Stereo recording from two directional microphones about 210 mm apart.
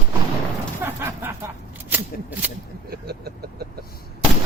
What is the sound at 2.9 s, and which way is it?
Vehicle, 50° right (ahead or behind).